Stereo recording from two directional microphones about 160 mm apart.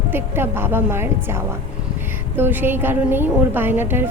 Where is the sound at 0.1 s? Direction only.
15° right (ahead or behind).